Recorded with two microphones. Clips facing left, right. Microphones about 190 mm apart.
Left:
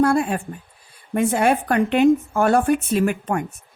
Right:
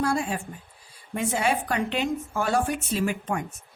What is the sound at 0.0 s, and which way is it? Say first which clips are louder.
A woman's voice: left 8 dB; 55° left (ahead or behind).